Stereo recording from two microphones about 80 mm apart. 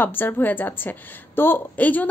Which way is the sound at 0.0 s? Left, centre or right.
Left.